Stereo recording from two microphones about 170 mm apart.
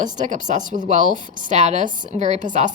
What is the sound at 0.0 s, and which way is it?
Speech, 50° right (ahead or behind).